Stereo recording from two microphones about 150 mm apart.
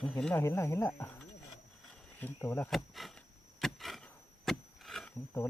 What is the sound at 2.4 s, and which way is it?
Speech, 15° left (ahead or behind).